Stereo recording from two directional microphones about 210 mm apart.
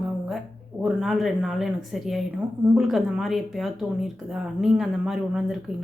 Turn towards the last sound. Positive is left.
turn(degrees=-5)  # may be behind; listen again after turning